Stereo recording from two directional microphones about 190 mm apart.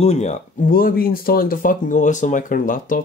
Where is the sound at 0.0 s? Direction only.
35° left (ahead or behind).